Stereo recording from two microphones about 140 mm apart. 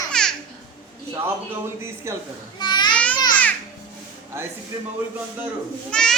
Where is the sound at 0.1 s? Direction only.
5° left (ahead or behind).